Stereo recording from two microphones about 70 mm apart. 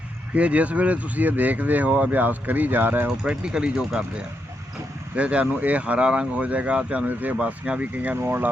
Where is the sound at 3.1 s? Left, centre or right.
Centre.